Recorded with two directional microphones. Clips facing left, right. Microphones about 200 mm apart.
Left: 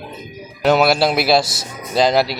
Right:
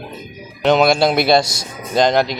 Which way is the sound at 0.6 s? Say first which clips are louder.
Right 1 dB; 5° left (ahead or behind).